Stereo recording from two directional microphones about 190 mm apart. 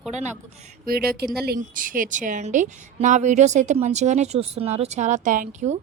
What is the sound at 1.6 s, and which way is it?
A woman's voice, 45° right (ahead or behind).